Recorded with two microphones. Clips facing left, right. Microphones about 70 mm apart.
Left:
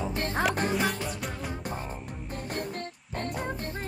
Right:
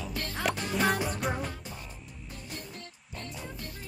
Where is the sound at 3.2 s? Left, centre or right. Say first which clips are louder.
Left 9 dB; left.